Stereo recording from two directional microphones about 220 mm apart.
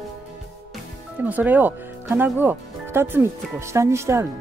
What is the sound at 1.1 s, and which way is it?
Speech, 5° right (ahead or behind).